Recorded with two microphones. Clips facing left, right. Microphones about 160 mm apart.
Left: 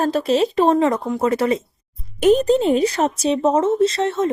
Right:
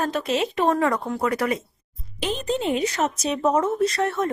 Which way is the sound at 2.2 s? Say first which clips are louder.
Left 11 dB; 45° left (ahead or behind).